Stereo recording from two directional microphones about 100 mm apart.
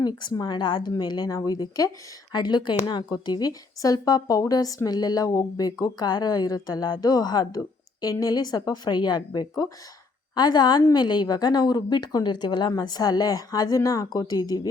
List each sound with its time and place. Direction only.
0.0 s speech: 45° left (ahead or behind)